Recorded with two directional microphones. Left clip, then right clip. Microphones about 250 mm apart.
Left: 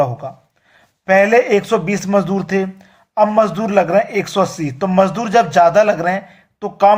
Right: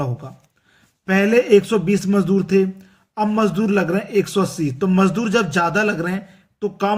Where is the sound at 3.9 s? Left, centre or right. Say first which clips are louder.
Left 5 dB; centre.